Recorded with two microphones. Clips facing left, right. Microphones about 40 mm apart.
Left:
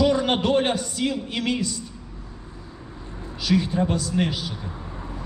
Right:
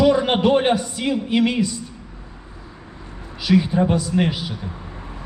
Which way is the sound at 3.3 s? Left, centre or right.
Centre.